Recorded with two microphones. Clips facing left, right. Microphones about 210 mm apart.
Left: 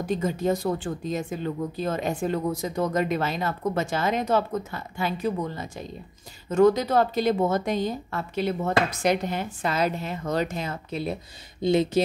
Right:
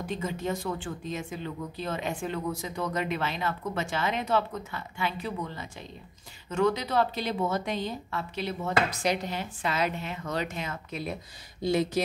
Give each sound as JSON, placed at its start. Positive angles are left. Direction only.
{"t": 0.0, "sound": "a woman's voice", "side_deg": 40}